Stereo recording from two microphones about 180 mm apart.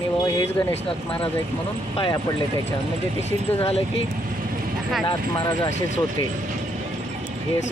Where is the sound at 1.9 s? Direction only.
30° left (ahead or behind).